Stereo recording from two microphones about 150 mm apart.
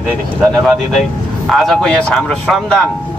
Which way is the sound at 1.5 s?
Centre (ahead or behind).